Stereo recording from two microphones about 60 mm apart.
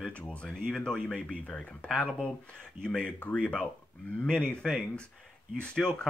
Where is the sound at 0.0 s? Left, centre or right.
Left.